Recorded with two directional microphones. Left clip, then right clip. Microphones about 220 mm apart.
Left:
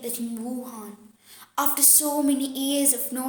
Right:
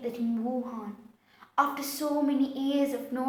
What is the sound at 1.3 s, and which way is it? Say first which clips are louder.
A woman's voice: right 1 dB; 45° left (ahead or behind).